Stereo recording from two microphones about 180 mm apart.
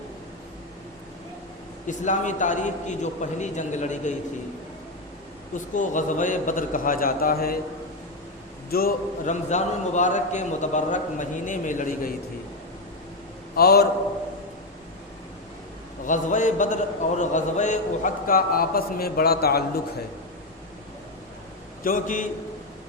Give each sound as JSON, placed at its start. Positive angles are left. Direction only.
{"t": 1.9, "sound": "a man's voice", "side_deg": 45}
{"t": 5.5, "sound": "a man's voice", "side_deg": 45}
{"t": 8.7, "sound": "a man's voice", "side_deg": 50}
{"t": 13.6, "sound": "a man's voice", "side_deg": 60}
{"t": 16.0, "sound": "a man's voice", "side_deg": 45}
{"t": 21.8, "sound": "a man's voice", "side_deg": 45}